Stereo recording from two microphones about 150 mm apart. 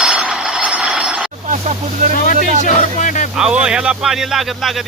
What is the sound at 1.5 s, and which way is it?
Speech, 55° right (ahead or behind).